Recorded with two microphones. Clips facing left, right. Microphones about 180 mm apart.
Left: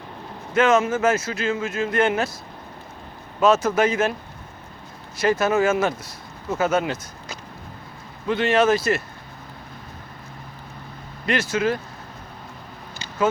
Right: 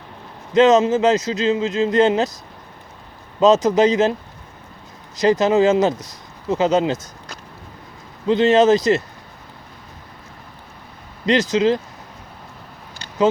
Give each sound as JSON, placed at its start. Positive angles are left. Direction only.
{"t": 0.5, "sound": "speech", "side_deg": -20}
{"t": 3.4, "sound": "speech", "side_deg": -20}
{"t": 5.1, "sound": "speech", "side_deg": -20}
{"t": 8.3, "sound": "speech", "side_deg": -20}
{"t": 11.3, "sound": "speech", "side_deg": -20}